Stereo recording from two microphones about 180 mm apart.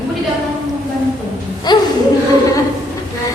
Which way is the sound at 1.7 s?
25° left (ahead or behind).